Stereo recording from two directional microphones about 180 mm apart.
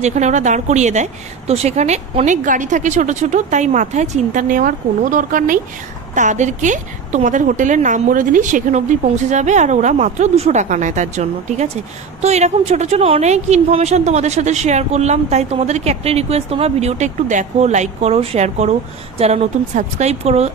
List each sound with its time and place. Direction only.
0.0 s a woman's voice: 40° right (ahead or behind)